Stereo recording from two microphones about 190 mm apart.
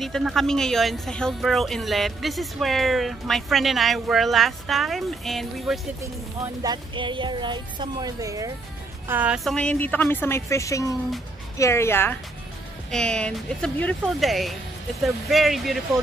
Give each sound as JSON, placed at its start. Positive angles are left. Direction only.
{"t": 0.0, "sound": "speech", "side_deg": 0}
{"t": 6.4, "sound": "a woman's voice", "side_deg": -20}